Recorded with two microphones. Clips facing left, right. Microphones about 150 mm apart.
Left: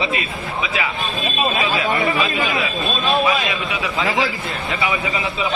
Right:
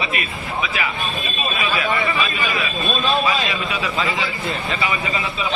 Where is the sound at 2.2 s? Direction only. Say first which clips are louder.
Left 3 dB; 20° left (ahead or behind).